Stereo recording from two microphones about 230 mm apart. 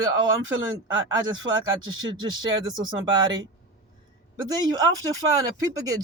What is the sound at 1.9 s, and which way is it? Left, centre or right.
A man's voice, centre.